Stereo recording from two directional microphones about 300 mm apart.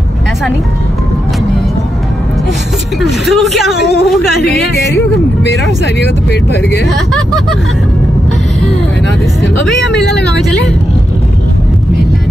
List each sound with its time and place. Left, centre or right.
3.0 s speech: centre
6.5 s speech: left